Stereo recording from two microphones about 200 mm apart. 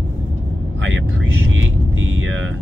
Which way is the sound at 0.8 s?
70° right (ahead or behind).